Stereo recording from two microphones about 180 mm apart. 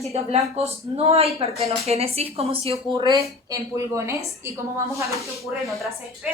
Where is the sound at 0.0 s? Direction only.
35° right (ahead or behind).